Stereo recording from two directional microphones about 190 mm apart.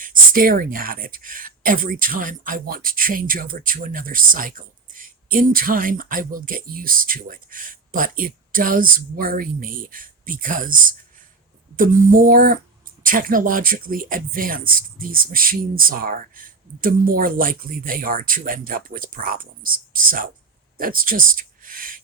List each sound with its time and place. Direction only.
0.0 s speech: 50° right (ahead or behind)
11.8 s speech: 45° right (ahead or behind)